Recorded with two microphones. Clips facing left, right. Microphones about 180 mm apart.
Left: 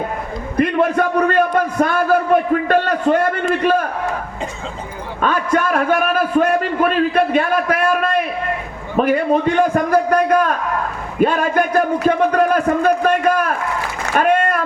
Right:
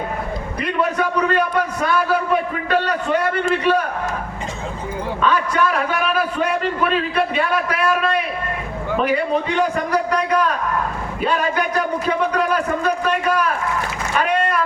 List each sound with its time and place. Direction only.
0.5 s a man's voice: 50° left (ahead or behind)
5.2 s a man's voice: 50° left (ahead or behind)
11.2 s a sound: 50° left (ahead or behind)